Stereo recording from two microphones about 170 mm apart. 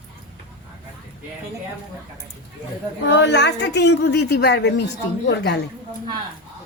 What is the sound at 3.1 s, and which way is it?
A woman's voice, 90° left.